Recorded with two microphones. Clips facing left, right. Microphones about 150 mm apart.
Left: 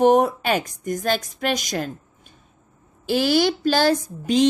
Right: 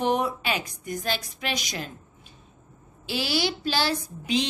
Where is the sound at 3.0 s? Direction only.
50° left (ahead or behind).